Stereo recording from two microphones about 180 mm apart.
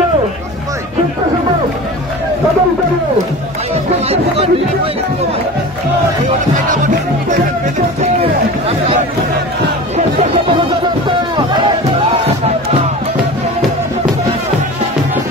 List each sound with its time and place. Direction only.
3.7 s speech: 35° right (ahead or behind)
8.0 s run: 35° right (ahead or behind)
9.9 s music: 35° right (ahead or behind)